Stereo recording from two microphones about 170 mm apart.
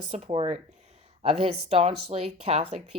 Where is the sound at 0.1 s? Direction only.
30° right (ahead or behind).